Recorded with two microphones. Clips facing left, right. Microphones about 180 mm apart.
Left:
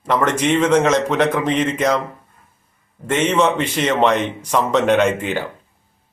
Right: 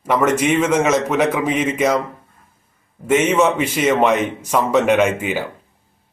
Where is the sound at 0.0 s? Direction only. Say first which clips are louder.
Right 2 dB; 10° right (ahead or behind).